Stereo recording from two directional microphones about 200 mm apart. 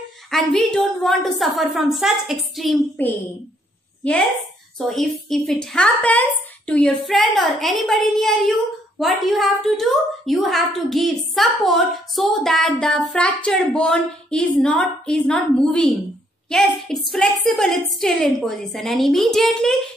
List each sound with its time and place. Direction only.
0.3 s a woman's voice: centre (ahead or behind)
4.7 s a woman's voice: centre (ahead or behind)